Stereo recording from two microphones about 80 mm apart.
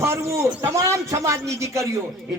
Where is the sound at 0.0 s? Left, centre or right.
Right.